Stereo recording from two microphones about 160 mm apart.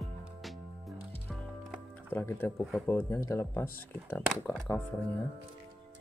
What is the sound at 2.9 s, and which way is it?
Speech, 15° left (ahead or behind).